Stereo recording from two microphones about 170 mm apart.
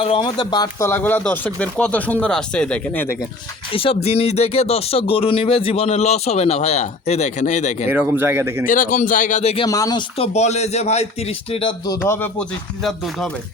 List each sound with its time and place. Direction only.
0.0 s speech: 30° left (ahead or behind); by 3.2 s 10° left (ahead or behind)
3.7 s speech: 30° left (ahead or behind)
7.9 s speech: 10° right (ahead or behind)
8.6 s a man's voice: 50° left (ahead or behind)
9.6 s speech: 20° left (ahead or behind)
10.2 s speech: 40° left (ahead or behind)
11.5 s speech: 30° left (ahead or behind)
12.0 s speech: 15° left (ahead or behind)